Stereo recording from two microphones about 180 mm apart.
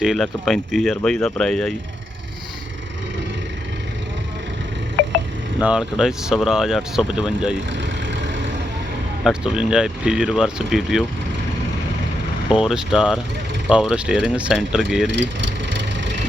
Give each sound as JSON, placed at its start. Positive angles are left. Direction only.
{"t": 0.0, "sound": "speech", "side_deg": 0}
{"t": 5.5, "sound": "speech", "side_deg": -5}
{"t": 7.7, "sound": "vehicle", "side_deg": -80}
{"t": 9.2, "sound": "speech", "side_deg": -5}
{"t": 12.5, "sound": "speech", "side_deg": -5}
{"t": 15.1, "sound": "vehicle", "side_deg": -85}